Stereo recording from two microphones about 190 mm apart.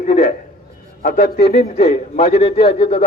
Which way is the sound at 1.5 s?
35° left (ahead or behind).